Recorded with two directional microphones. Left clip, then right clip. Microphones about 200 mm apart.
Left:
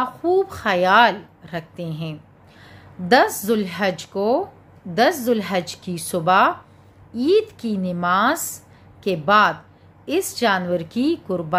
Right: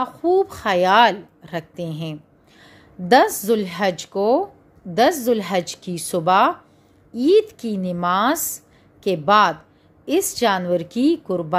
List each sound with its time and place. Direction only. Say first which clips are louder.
0.0 s a woman's voice: right 1 dB; 25° right (ahead or behind)